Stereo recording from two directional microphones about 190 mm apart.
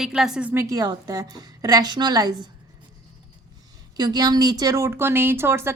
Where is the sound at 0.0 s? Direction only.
5° right (ahead or behind); by 2.3 s 20° right (ahead or behind).